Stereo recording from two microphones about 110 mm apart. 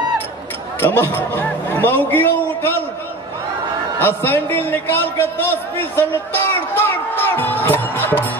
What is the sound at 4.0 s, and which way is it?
A man's voice, 20° left (ahead or behind).